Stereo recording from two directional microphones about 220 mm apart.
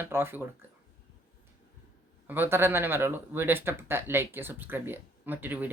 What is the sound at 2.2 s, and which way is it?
Speech, 10° right (ahead or behind).